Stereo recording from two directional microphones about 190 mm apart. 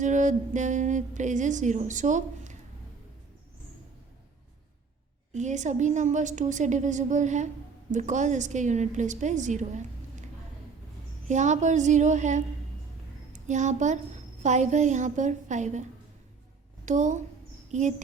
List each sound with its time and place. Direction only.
0.0 s a woman's voice: 40° right (ahead or behind)
5.3 s a woman's voice: 40° right (ahead or behind)
11.3 s a woman's voice: 40° right (ahead or behind)